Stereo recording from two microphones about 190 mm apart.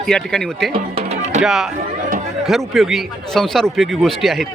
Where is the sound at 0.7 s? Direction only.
30° right (ahead or behind).